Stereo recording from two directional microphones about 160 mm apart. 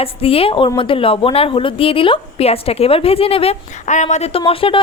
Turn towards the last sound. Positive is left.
turn(degrees=35)  # may be behind; listen again after turning